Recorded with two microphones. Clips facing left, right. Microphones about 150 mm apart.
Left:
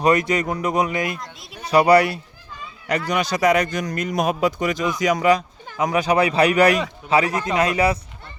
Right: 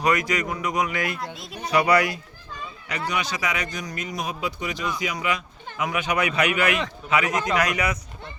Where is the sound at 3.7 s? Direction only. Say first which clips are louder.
Left 8 dB; 55° left (ahead or behind); by 8.0 s 30° left (ahead or behind).